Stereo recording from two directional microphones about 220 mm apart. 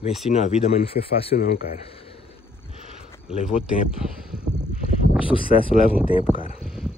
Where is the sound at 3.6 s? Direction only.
5° right (ahead or behind).